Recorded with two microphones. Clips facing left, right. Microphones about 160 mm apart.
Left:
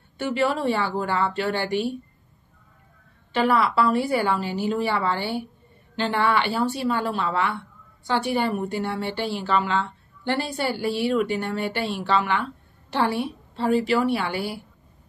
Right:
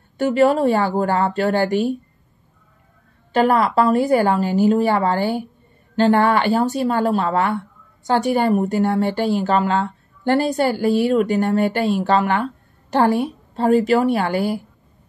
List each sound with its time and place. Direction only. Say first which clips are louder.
0.2 s a woman's voice: right 8 dB; 40° right (ahead or behind)
3.3 s a woman's voice: right 5 dB; 45° right (ahead or behind)